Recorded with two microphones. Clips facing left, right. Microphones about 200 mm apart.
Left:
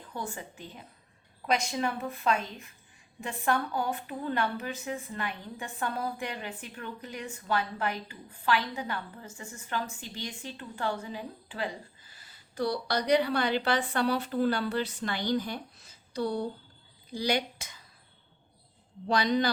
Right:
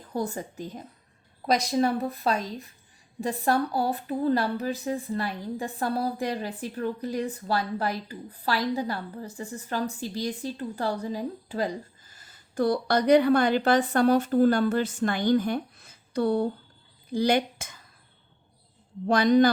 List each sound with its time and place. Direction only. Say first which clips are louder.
0.0 s a woman's voice: right 8 dB; 40° right (ahead or behind)
19.0 s a man's voice: right 7 dB; 50° right (ahead or behind)